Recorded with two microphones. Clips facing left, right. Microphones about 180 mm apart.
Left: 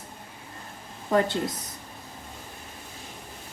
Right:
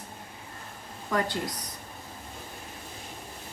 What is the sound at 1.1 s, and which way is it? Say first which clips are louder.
Speech: left 5 dB; 25° left (ahead or behind).